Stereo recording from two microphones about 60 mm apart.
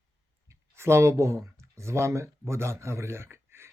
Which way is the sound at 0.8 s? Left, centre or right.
Right.